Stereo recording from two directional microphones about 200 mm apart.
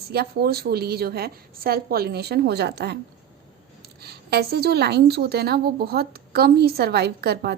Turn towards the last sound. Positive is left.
turn(degrees=-55)  # may be behind; listen again after turning